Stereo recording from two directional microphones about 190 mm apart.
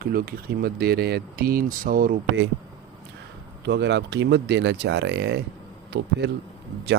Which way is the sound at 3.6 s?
65° right (ahead or behind).